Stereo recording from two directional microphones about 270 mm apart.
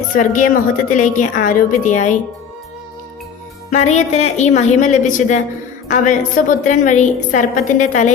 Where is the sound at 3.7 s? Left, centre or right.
Left.